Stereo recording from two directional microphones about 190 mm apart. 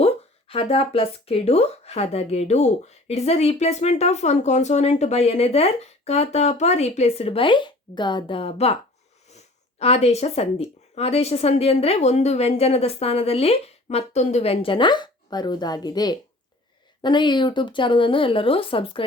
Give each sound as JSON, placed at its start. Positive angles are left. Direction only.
{"t": 0.0, "sound": "speech", "side_deg": 30}